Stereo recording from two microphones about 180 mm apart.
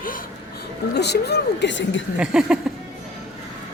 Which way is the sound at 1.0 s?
65° left (ahead or behind).